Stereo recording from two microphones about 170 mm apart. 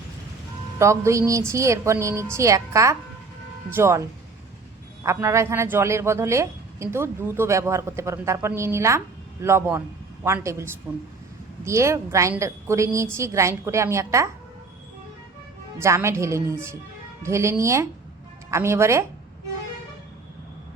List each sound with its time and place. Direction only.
0.8 s a woman's voice: 15° right (ahead or behind)
5.0 s a woman's voice: 15° right (ahead or behind)
15.8 s a woman's voice: 15° right (ahead or behind)